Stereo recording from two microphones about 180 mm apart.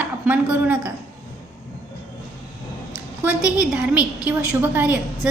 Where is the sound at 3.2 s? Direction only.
5° right (ahead or behind).